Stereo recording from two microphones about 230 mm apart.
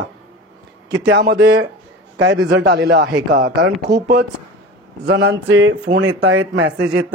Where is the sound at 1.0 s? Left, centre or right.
Right.